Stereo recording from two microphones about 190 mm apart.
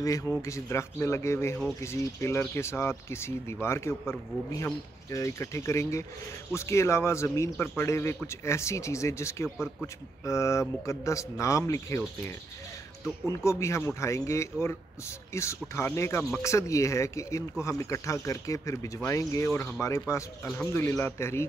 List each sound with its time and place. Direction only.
0.0 s a man's voice: 15° left (ahead or behind)
13.3 s a man's voice: 15° left (ahead or behind)